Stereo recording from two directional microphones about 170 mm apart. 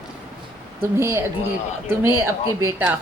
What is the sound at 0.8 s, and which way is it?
Speech, 15° right (ahead or behind).